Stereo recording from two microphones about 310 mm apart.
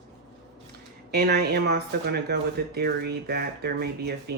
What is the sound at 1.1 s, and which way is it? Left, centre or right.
Speech, right.